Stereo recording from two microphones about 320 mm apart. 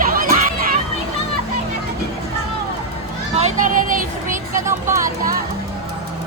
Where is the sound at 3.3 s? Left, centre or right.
Right.